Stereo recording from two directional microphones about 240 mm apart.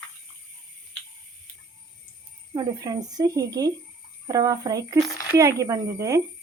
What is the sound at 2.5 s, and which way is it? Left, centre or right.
Speech, centre.